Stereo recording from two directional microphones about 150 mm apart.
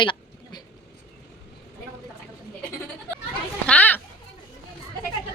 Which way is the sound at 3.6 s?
10° left (ahead or behind).